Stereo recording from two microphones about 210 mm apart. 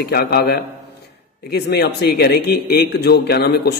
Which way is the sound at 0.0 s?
45° left (ahead or behind).